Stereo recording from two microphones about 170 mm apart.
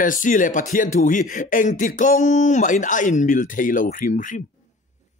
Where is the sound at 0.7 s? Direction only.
50° left (ahead or behind).